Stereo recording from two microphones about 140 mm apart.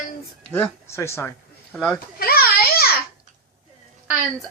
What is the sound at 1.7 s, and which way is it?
Speech, 5° left (ahead or behind).